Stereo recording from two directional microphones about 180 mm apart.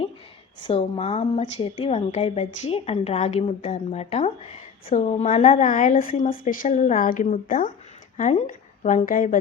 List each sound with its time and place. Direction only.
0.6 s a woman's voice: 35° left (ahead or behind)